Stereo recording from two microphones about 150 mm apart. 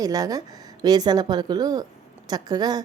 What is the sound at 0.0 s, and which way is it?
Speech, 25° right (ahead or behind).